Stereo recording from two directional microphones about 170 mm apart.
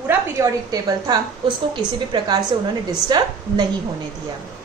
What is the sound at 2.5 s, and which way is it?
A woman's voice, 30° right (ahead or behind).